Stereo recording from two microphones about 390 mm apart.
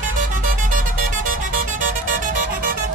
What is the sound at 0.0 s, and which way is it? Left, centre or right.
Music, centre.